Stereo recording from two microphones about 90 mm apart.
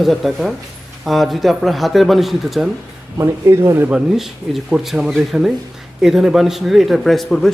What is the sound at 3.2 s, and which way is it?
Speech, 30° right (ahead or behind).